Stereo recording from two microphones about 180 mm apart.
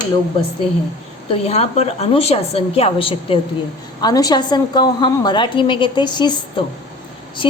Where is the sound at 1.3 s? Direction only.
35° left (ahead or behind).